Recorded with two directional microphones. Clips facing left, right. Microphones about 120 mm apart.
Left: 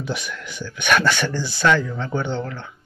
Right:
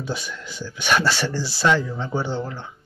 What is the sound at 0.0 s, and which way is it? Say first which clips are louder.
Speech: left 1 dB; 30° right (ahead or behind).